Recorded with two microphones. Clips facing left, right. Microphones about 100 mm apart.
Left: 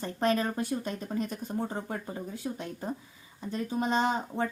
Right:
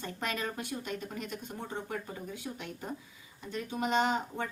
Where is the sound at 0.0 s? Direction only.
35° left (ahead or behind).